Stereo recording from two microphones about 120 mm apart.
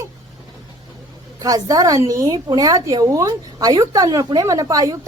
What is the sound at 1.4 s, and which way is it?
A woman's voice, 30° right (ahead or behind).